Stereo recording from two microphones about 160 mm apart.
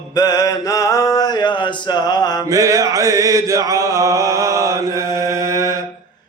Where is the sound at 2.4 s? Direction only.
20° right (ahead or behind).